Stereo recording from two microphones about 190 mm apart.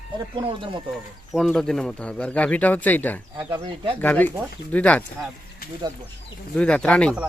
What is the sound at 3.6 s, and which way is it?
Speech, 25° right (ahead or behind).